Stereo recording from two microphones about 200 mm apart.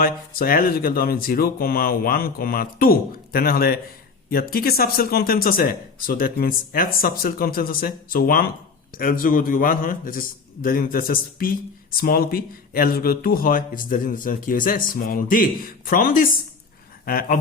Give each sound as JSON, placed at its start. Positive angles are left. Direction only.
{"t": 0.0, "sound": "speech", "side_deg": 45}